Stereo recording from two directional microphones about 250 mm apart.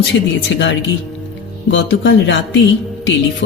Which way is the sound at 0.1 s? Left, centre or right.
Left.